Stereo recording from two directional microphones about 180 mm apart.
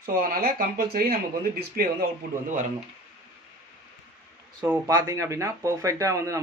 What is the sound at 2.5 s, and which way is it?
Speech, 45° right (ahead or behind).